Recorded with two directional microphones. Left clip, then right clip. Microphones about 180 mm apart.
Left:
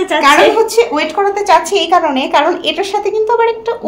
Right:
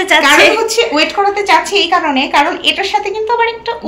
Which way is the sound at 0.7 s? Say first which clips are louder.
Even; 45° left (ahead or behind).